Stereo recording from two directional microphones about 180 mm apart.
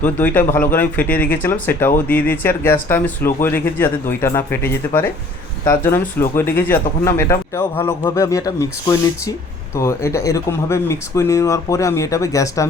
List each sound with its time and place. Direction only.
0.0 s speech: 10° left (ahead or behind)